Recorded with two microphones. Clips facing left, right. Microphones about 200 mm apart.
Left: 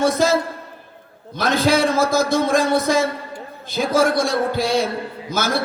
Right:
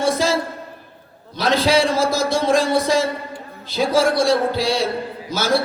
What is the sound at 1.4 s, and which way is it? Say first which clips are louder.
A man's voice: even; 50° left (ahead or behind).